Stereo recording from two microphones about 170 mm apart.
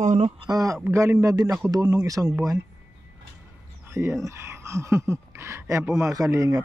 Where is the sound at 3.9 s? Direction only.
15° right (ahead or behind).